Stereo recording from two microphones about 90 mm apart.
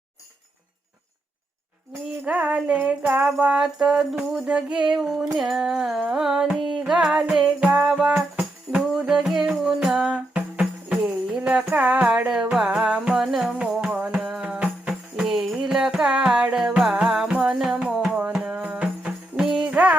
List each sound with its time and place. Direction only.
2.2 s music: 15° right (ahead or behind)